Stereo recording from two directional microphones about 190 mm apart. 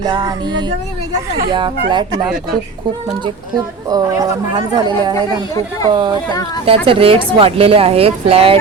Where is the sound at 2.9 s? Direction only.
25° right (ahead or behind).